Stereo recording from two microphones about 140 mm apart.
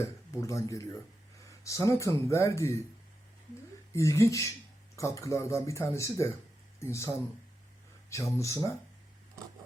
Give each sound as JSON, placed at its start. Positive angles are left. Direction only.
{"t": 0.0, "sound": "speech", "side_deg": 20}
{"t": 3.9, "sound": "speech", "side_deg": 20}
{"t": 8.1, "sound": "speech", "side_deg": 20}